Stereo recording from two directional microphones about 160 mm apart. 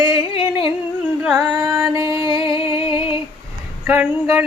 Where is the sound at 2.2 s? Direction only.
35° left (ahead or behind).